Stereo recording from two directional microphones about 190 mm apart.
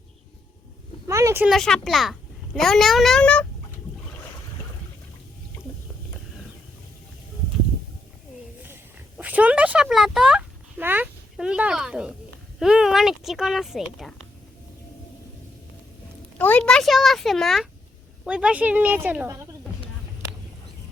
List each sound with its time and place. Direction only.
1.0 s speech: 15° right (ahead or behind)
1.5 s speech: centre (ahead or behind)
8.6 s a sound: 10° right (ahead or behind)
12.5 s speech: 5° right (ahead or behind)
16.4 s speech: 10° left (ahead or behind); by 19.4 s 10° right (ahead or behind)